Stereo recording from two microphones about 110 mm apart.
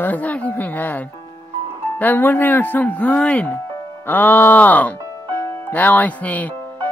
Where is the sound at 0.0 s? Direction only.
15° left (ahead or behind).